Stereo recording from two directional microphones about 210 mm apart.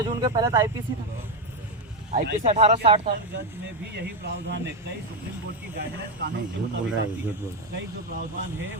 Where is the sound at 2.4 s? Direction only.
30° right (ahead or behind).